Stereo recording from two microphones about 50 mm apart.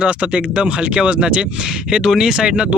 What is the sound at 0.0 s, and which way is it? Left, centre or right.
Speech, right.